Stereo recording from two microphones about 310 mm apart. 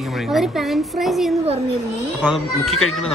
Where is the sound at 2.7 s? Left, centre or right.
Left.